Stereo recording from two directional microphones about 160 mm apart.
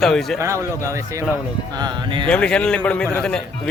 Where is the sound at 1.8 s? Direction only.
30° right (ahead or behind).